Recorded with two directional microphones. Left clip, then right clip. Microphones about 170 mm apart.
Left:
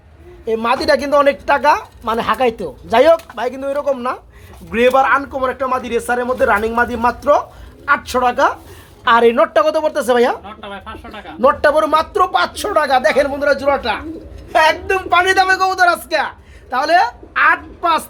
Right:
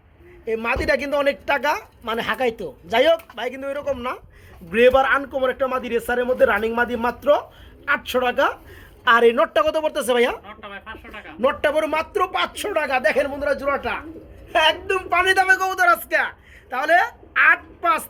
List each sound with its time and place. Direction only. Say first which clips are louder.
0.4 s a woman's voice: left 6 dB; 5° left (ahead or behind)
4.7 s speech: left 3 dB; 15° right (ahead or behind)
9.0 s a woman's voice: left 4 dB; 5° right (ahead or behind)
10.4 s speech: left 6 dB; 30° left (ahead or behind)
11.3 s a woman's voice: left 7 dB; 5° right (ahead or behind)
15.1 s a woman's voice: left 4 dB; 10° right (ahead or behind)